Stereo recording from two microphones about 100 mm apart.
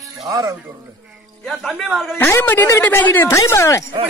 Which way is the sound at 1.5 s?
Centre (ahead or behind).